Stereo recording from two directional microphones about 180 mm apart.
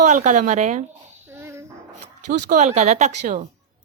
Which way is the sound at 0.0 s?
40° right (ahead or behind).